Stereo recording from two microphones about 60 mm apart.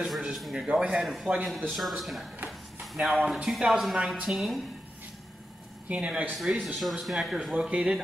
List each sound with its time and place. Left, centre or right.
0.0 s a sound: centre
0.7 s speech: centre
1.0 s a woman's voice: centre
2.4 s a sound: centre
3.4 s a woman's voice: centre
5.9 s speech: right
6.3 s a woman's voice: centre
7.5 s speech: centre